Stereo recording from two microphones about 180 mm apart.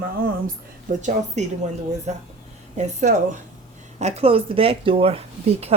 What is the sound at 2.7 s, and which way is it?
Speech, 40° right (ahead or behind).